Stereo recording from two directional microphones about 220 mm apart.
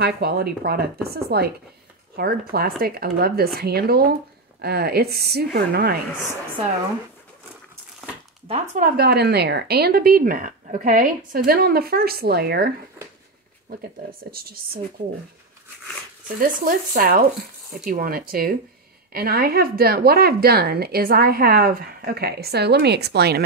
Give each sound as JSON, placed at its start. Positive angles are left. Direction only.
{"t": 0.0, "sound": "a woman's voice", "side_deg": -45}
{"t": 8.5, "sound": "speech", "side_deg": -25}
{"t": 8.8, "sound": "a woman's voice", "side_deg": -45}
{"t": 14.3, "sound": "a woman's voice", "side_deg": -45}
{"t": 16.3, "sound": "a woman's voice", "side_deg": -40}